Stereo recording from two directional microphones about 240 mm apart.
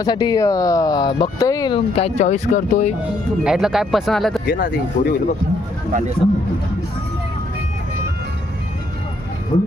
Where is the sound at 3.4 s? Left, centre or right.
Centre.